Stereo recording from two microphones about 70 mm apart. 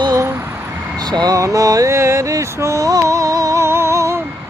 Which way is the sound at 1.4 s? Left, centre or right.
Right.